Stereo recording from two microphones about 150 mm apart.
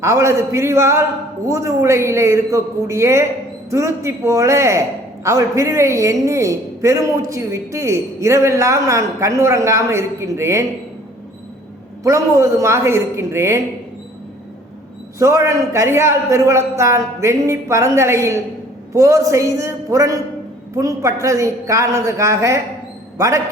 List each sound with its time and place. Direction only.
0.0 s a woman's voice: 20° right (ahead or behind)
12.0 s a woman's voice: 20° right (ahead or behind)
15.2 s a woman's voice: 20° right (ahead or behind)